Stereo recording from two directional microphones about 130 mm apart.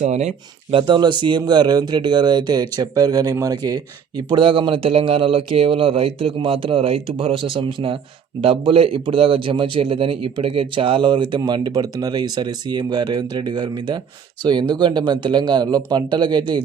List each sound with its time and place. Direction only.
0.0 s speech: 60° right (ahead or behind)
0.8 s a man's voice: 35° right (ahead or behind)